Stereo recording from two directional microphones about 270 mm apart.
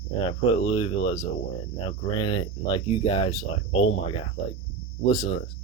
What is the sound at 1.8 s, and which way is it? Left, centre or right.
Speech, centre.